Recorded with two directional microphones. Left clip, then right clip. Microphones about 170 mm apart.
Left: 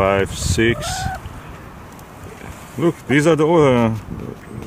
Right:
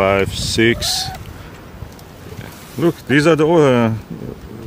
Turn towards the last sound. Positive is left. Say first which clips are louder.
# right 1 dB
turn(degrees=0)  # may be behind; listen again after turning